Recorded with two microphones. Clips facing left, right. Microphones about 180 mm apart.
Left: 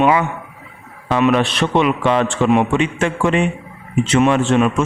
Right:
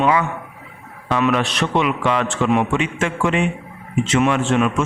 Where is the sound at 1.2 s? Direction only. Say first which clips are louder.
Left 4 dB; 30° left (ahead or behind).